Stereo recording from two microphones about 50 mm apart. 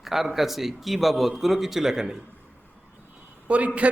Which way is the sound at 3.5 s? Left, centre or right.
Right.